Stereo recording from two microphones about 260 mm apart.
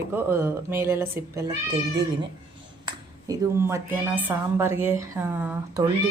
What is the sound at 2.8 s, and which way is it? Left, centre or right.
A woman's voice, centre.